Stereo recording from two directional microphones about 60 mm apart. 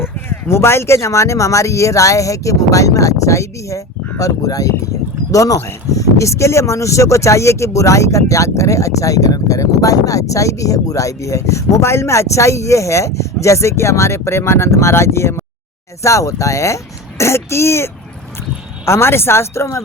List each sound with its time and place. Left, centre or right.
0.0 s speech: left
4.2 s speech: left
5.3 s speech: left
16.0 s speech: left